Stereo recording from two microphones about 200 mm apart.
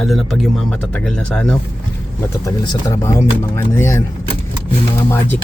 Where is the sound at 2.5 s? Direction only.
15° left (ahead or behind).